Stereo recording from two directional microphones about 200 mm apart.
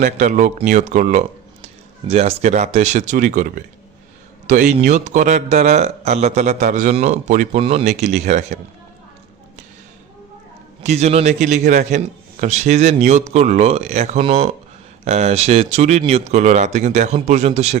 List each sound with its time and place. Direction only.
0.0 s a man's voice: 40° right (ahead or behind)
10.8 s a man's voice: 35° right (ahead or behind)